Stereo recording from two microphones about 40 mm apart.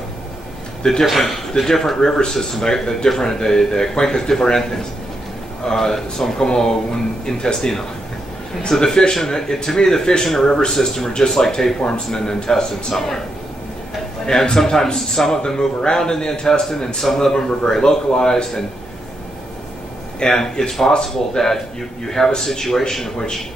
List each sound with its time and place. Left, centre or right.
1.1 s a man's voice: centre
14.2 s a man's voice: centre
20.2 s a man's voice: centre